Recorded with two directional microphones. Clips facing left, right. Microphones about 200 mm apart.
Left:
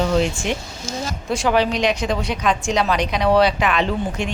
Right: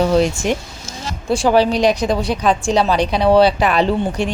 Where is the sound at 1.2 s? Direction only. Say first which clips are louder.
Right 5 dB; 30° right (ahead or behind).